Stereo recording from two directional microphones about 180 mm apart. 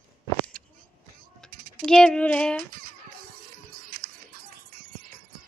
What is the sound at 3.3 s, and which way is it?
Music, 55° right (ahead or behind).